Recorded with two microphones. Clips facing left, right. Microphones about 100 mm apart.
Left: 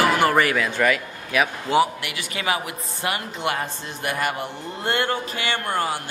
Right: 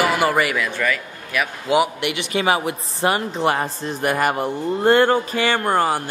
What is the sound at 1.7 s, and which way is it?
A woman's voice, 20° right (ahead or behind).